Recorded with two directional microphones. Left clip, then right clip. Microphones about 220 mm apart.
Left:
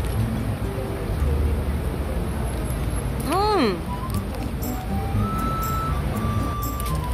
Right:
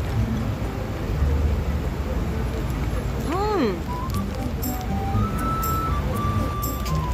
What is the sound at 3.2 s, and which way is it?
Music, 25° left (ahead or behind).